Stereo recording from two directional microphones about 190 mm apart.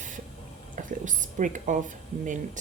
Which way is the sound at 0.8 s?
40° right (ahead or behind).